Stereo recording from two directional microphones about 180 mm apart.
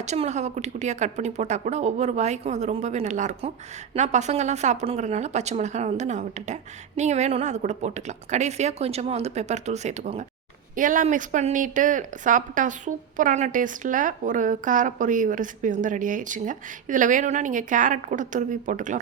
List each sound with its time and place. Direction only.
0.0 s a woman's voice: 40° right (ahead or behind)